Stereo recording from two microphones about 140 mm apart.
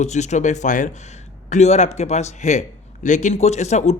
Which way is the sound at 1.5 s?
50° left (ahead or behind).